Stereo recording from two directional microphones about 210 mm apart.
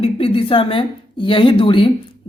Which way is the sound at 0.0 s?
25° left (ahead or behind).